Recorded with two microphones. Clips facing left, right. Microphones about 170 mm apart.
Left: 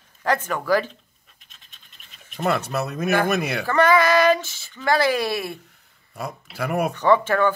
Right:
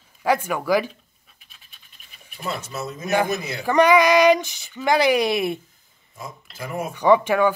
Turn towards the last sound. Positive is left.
turn(degrees=-15)  # may be behind; listen again after turning